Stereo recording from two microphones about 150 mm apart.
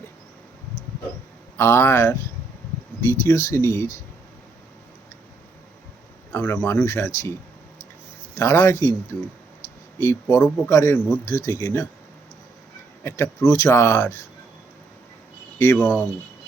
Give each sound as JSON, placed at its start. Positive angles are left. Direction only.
{"t": 1.5, "sound": "speech", "side_deg": 15}
{"t": 6.3, "sound": "speech", "side_deg": 10}
{"t": 8.4, "sound": "speech", "side_deg": 20}
{"t": 13.1, "sound": "speech", "side_deg": 15}
{"t": 15.5, "sound": "speech", "side_deg": 15}